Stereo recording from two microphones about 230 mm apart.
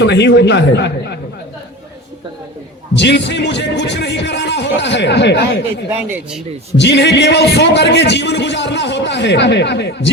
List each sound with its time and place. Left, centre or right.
0.0 s a man's voice: left
2.9 s a man's voice: left
5.9 s speech: centre
6.7 s a man's voice: left